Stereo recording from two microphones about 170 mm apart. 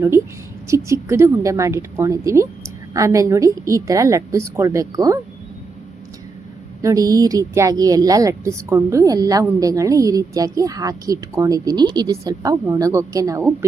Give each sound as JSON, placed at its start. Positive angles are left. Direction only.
{"t": 0.7, "sound": "a woman's voice", "side_deg": -15}
{"t": 6.8, "sound": "a woman's voice", "side_deg": -20}